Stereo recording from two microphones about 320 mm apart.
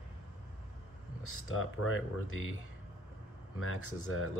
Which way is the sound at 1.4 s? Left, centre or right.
Left.